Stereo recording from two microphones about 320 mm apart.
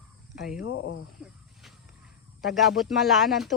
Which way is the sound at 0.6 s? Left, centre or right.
Left.